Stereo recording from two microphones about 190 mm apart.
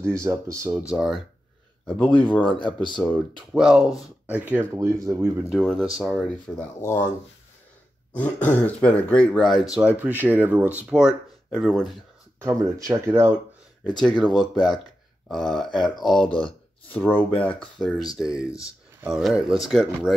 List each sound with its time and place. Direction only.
0.0 s speech: 15° right (ahead or behind); by 2.5 s 5° left (ahead or behind)
2.6 s speech: 25° left (ahead or behind)
3.5 s speech: 5° right (ahead or behind)
5.5 s speech: centre (ahead or behind)
8.2 s speech: 10° left (ahead or behind)
12.4 s speech: 15° right (ahead or behind)
14.0 s speech: 5° left (ahead or behind)
18.5 s speech: 15° left (ahead or behind)
19.1 s speech: centre (ahead or behind)